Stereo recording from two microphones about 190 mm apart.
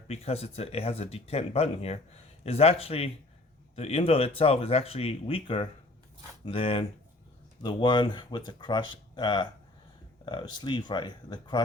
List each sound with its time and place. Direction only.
0.1 s speech: 30° left (ahead or behind)